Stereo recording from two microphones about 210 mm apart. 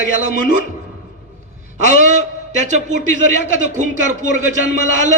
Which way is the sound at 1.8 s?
35° right (ahead or behind).